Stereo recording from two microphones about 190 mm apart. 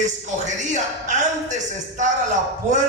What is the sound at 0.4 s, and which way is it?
A man's voice, 40° right (ahead or behind).